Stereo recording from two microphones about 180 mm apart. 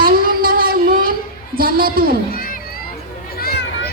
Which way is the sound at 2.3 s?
50° left (ahead or behind).